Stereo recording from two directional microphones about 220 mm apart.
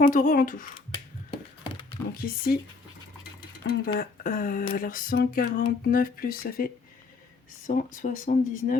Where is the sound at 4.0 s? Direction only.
40° left (ahead or behind).